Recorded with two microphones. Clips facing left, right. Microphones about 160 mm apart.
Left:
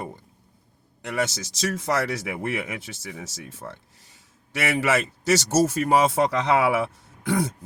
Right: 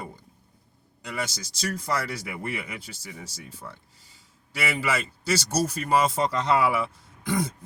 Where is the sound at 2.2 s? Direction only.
50° left (ahead or behind).